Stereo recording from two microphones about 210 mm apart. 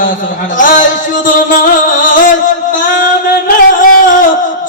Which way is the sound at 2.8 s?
40° left (ahead or behind).